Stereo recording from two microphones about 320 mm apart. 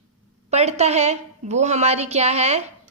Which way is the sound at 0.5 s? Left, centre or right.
Centre.